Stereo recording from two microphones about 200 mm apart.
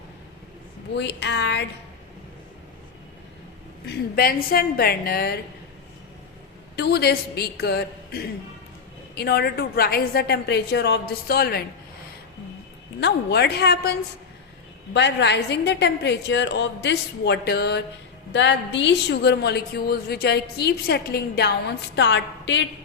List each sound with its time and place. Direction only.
0.9 s a woman's voice: 60° left (ahead or behind)
3.8 s a woman's voice: 50° left (ahead or behind)
6.7 s a woman's voice: 55° left (ahead or behind)
13.0 s a woman's voice: 55° left (ahead or behind)
14.9 s a woman's voice: 60° left (ahead or behind)